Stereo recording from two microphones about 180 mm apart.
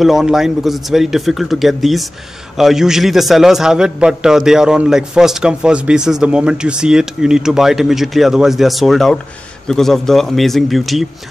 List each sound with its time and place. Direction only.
0.0 s a man's voice: centre (ahead or behind)